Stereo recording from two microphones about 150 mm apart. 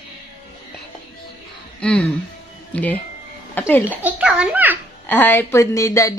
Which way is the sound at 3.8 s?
10° right (ahead or behind).